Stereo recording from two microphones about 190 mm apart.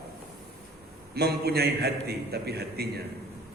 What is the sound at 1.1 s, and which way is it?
A man's voice, 55° right (ahead or behind).